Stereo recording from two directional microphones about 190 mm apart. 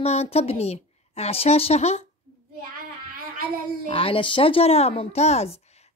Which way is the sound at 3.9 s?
30° left (ahead or behind).